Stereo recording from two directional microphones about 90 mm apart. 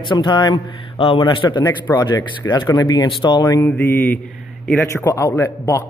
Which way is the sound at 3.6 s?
25° left (ahead or behind).